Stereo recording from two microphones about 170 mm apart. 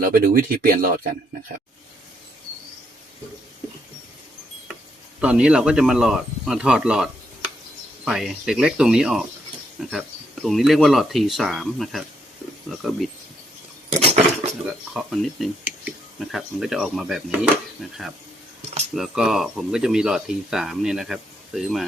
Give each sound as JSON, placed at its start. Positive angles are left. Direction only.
{"t": 0.0, "sound": "speech", "side_deg": -55}
{"t": 5.2, "sound": "speech", "side_deg": -5}
{"t": 10.4, "sound": "speech", "side_deg": 0}
{"t": 14.0, "sound": "cutlery", "side_deg": -35}
{"t": 14.9, "sound": "speech", "side_deg": 0}
{"t": 18.9, "sound": "speech", "side_deg": 0}